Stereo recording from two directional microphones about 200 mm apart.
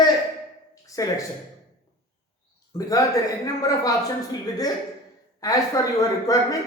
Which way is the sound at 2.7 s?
15° left (ahead or behind).